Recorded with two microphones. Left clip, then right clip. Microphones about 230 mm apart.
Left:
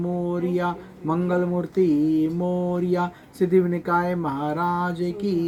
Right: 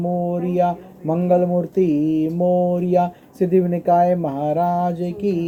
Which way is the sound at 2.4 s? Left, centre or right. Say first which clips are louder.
Right 7 dB; centre.